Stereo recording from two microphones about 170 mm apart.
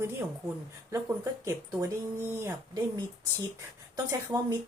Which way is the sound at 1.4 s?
20° right (ahead or behind).